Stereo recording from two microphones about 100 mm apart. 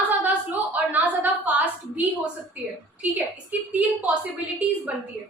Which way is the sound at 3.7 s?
15° right (ahead or behind).